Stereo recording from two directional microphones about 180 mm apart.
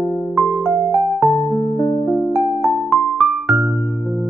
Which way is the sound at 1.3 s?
20° left (ahead or behind).